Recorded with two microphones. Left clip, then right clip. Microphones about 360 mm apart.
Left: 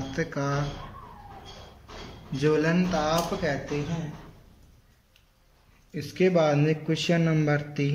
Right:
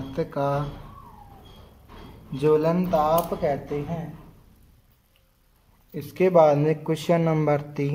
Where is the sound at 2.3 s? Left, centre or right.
Centre.